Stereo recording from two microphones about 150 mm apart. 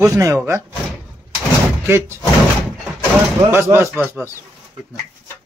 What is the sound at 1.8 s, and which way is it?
Speech, 15° right (ahead or behind).